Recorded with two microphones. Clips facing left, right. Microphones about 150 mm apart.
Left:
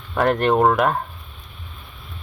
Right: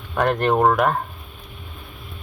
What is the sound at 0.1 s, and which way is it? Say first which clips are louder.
Speech: left 1 dB; centre (ahead or behind).